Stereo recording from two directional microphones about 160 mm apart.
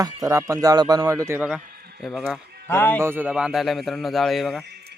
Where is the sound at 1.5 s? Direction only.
5° right (ahead or behind).